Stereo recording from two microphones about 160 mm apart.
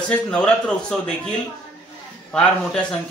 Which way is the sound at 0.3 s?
5° left (ahead or behind).